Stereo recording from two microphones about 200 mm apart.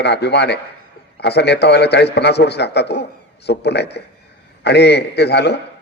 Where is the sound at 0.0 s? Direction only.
55° left (ahead or behind).